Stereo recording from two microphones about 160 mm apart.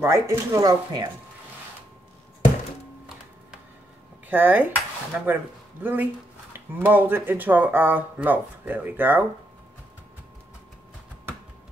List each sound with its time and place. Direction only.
0.0 s speech: 15° right (ahead or behind)
4.3 s speech: 10° right (ahead or behind)